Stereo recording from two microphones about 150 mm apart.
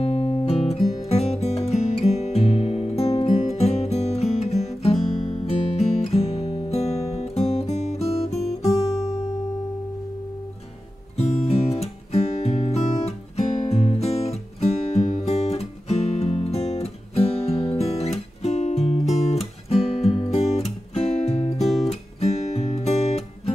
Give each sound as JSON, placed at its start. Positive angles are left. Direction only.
{"t": 0.0, "sound": "guitar", "side_deg": 40}
{"t": 1.0, "sound": "music", "side_deg": 45}
{"t": 11.1, "sound": "music", "side_deg": 40}
{"t": 21.8, "sound": "guitar", "side_deg": 45}